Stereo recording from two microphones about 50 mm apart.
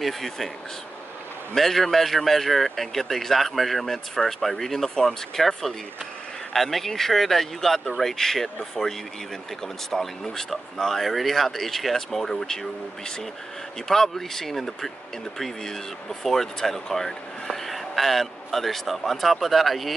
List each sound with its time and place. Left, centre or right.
0.0 s speech: centre
1.5 s speech: centre
6.5 s speech: centre
9.8 s speech: centre
13.8 s speech: centre